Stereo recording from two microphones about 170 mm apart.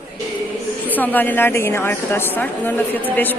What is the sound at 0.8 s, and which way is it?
A woman's voice, 10° left (ahead or behind).